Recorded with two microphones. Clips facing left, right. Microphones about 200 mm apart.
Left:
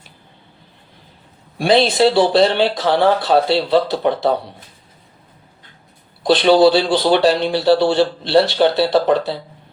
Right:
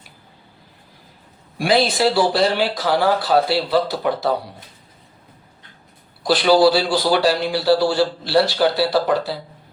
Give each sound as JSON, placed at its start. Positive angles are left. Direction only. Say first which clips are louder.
{"t": 1.5, "sound": "a man's voice", "louder": "left 4 dB", "side_deg": 25}
{"t": 6.2, "sound": "a man's voice", "louder": "left 3 dB", "side_deg": 25}